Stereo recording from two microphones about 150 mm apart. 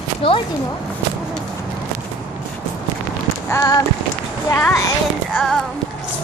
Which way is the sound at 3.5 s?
20° left (ahead or behind).